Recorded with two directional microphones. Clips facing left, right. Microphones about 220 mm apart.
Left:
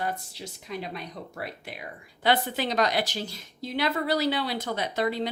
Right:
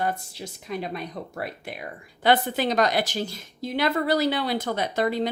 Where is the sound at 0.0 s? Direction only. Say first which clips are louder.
Right 4 dB; 50° right (ahead or behind).